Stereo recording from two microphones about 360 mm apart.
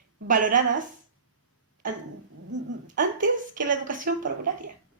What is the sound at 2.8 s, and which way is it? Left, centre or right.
A woman's voice, right.